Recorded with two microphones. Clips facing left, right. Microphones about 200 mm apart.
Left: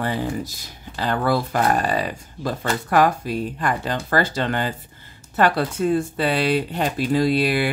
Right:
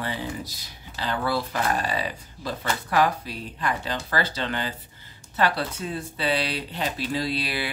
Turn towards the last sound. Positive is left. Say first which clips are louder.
# left 9 dB
turn(degrees=50)  # may be behind; listen again after turning